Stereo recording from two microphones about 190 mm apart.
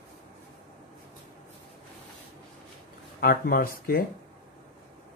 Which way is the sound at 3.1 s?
50° left (ahead or behind).